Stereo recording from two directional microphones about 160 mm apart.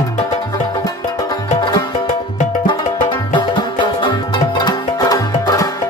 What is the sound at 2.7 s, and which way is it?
Music, 30° left (ahead or behind).